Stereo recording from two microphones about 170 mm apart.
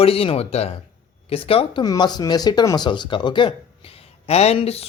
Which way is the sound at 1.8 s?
25° left (ahead or behind).